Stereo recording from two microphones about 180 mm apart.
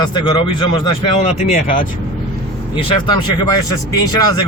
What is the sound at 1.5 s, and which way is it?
Speech, 50° left (ahead or behind).